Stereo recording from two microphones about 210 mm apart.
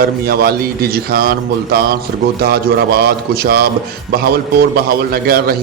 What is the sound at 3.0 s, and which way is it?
Speech, 50° right (ahead or behind).